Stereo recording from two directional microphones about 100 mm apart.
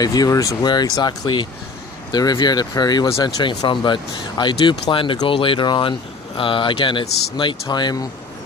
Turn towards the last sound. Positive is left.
turn(degrees=45)  # may be behind; listen again after turning